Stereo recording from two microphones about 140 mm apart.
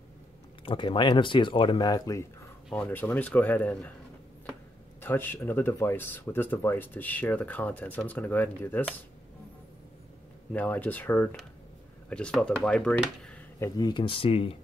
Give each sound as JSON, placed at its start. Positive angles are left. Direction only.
{"t": 0.7, "sound": "speech", "side_deg": 35}
{"t": 2.7, "sound": "speech", "side_deg": 10}
{"t": 5.0, "sound": "speech", "side_deg": 15}
{"t": 10.5, "sound": "speech", "side_deg": 10}
{"t": 13.7, "sound": "speech", "side_deg": 30}